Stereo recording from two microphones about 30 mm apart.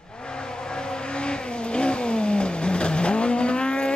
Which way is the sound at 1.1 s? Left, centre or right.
Left.